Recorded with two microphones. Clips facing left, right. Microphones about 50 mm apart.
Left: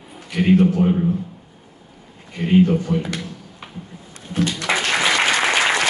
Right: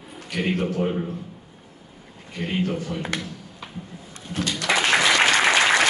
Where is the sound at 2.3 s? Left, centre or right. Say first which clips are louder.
Left 10 dB; centre.